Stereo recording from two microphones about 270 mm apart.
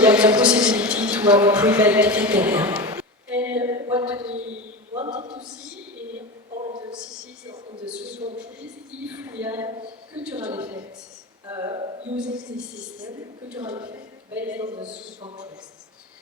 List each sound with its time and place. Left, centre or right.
0.0 s a man's voice: centre
5.2 s a woman's voice: centre
6.6 s a woman's voice: centre
7.9 s a woman's voice: centre
10.2 s a woman's voice: centre
12.1 s a woman's voice: centre
13.6 s a woman's voice: centre
14.3 s a woman's voice: centre